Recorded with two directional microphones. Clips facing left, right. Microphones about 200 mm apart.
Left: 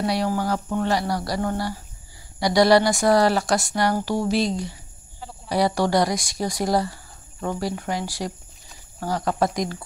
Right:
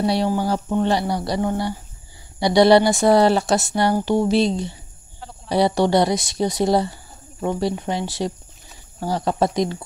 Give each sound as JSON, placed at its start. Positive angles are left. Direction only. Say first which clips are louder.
{"t": 0.0, "sound": "speech", "louder": "right 3 dB", "side_deg": -25}